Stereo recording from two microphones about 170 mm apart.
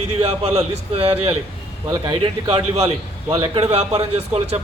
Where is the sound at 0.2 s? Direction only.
35° right (ahead or behind).